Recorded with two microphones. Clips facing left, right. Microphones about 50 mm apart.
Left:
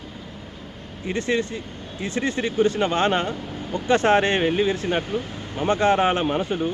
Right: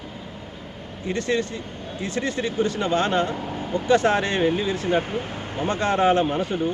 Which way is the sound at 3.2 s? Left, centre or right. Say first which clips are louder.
Right 1 dB; right.